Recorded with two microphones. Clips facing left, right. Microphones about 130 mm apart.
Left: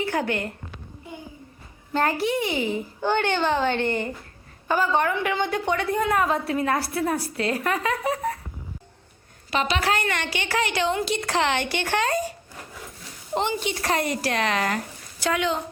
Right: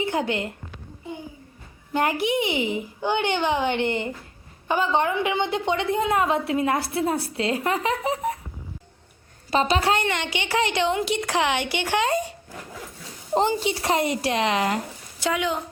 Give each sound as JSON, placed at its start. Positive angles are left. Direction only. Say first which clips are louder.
{"t": 0.0, "sound": "a woman's voice", "louder": "right 1 dB", "side_deg": -20}
{"t": 1.9, "sound": "a woman's voice", "louder": "even", "side_deg": -15}
{"t": 9.5, "sound": "a woman's voice", "louder": "right 3 dB", "side_deg": -30}
{"t": 13.3, "sound": "a woman's voice", "louder": "right 4 dB", "side_deg": -35}
{"t": 13.6, "sound": "a woman's voice", "louder": "right 2 dB", "side_deg": -25}